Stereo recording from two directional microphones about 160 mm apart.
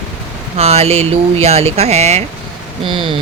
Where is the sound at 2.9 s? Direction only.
30° right (ahead or behind).